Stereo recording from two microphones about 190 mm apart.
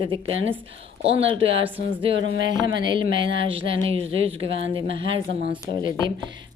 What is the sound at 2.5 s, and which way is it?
Speech, 25° right (ahead or behind).